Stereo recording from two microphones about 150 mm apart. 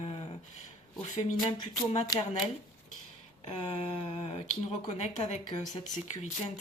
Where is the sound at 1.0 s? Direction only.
55° left (ahead or behind).